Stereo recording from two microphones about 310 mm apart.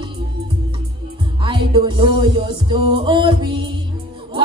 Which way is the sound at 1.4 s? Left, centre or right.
Centre.